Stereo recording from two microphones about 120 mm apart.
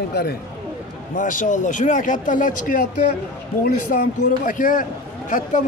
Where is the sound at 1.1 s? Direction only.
90° left.